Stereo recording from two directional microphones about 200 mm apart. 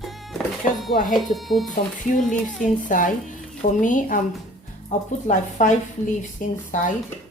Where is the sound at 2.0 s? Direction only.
40° left (ahead or behind).